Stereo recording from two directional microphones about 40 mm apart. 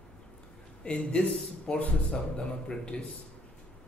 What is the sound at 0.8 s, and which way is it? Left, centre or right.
Speech, left.